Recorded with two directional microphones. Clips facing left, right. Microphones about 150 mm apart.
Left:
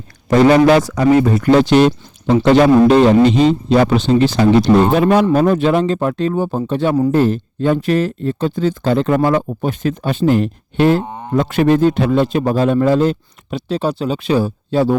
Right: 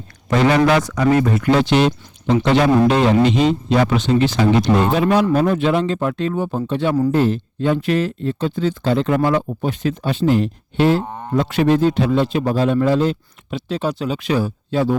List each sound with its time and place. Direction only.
0.3 s speech: 35° left (ahead or behind)
4.9 s speech: 50° left (ahead or behind); by 14.9 s 30° left (ahead or behind)